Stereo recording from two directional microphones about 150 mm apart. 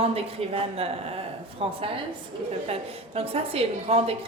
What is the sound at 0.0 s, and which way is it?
A woman's voice, 40° right (ahead or behind).